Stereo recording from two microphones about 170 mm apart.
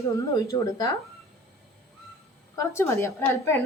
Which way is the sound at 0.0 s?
20° left (ahead or behind).